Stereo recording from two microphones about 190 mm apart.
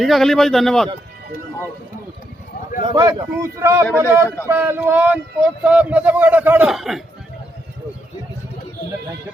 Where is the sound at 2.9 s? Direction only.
20° right (ahead or behind); by 7.0 s centre (ahead or behind).